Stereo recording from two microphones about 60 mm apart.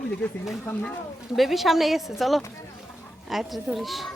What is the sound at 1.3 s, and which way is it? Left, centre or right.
Speech, centre.